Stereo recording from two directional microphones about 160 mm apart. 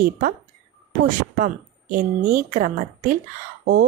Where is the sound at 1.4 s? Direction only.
60° right (ahead or behind).